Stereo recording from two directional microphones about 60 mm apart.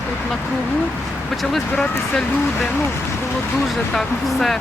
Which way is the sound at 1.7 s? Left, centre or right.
Centre.